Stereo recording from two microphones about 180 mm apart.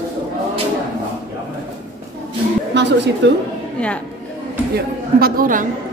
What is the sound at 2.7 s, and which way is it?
Speech, 75° right (ahead or behind).